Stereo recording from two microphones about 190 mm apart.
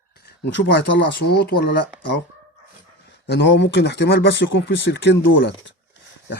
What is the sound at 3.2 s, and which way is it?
Speech, 65° left (ahead or behind).